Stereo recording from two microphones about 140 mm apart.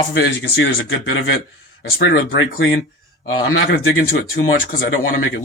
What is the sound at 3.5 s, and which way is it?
Speech, 90° left.